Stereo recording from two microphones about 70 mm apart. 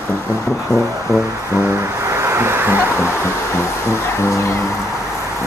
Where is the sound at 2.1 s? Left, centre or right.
Right.